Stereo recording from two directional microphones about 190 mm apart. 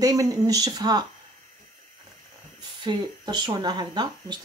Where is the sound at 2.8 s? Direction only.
25° right (ahead or behind).